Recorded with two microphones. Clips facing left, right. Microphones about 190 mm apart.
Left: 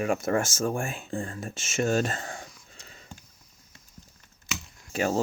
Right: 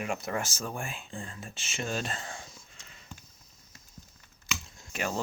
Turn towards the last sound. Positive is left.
turn(degrees=40)  # may be behind; listen again after turning